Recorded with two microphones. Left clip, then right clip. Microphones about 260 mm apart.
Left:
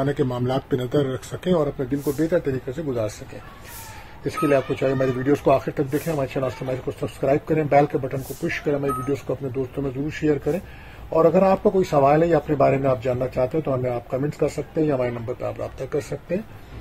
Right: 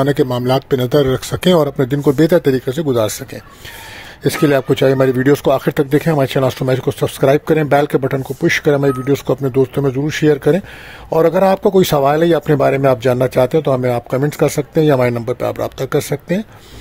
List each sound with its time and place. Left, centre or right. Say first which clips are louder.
0.0 s a man's voice: right 9 dB; right
4.2 s a man's voice: right 7 dB; right
8.2 s speech: right 10 dB; centre
8.5 s a man's voice: right 10 dB; right